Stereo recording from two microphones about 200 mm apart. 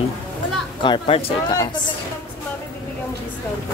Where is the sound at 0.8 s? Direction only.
25° left (ahead or behind).